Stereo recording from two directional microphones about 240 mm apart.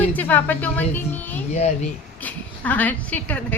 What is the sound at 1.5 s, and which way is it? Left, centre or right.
Speech, left.